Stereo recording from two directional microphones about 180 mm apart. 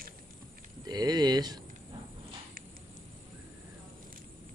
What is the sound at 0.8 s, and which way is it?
Speech, 20° right (ahead or behind).